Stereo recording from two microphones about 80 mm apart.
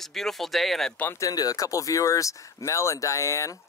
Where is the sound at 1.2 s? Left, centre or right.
Left.